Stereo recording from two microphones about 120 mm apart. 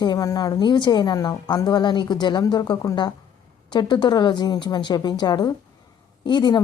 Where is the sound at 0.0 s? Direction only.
35° left (ahead or behind).